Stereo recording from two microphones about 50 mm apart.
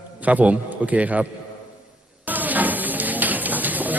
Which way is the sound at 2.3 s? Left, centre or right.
Right.